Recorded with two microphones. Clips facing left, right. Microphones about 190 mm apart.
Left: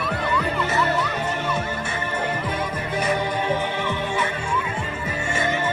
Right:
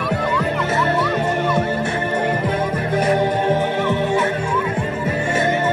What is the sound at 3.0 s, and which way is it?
Music, 50° right (ahead or behind).